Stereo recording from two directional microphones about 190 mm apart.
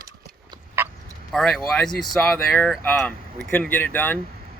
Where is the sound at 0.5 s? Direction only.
25° right (ahead or behind).